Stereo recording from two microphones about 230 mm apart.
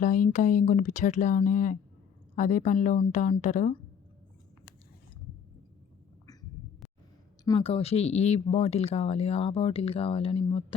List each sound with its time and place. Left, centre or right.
0.0 s speech: left
7.4 s speech: left